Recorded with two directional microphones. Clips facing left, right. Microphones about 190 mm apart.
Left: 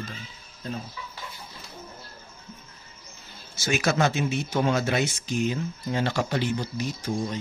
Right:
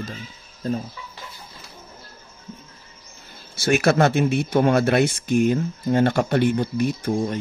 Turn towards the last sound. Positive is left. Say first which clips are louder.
# right 6 dB
turn(degrees=-55)  # may be behind; listen again after turning